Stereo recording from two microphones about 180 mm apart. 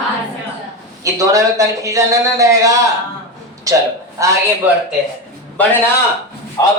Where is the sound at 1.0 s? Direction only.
20° right (ahead or behind).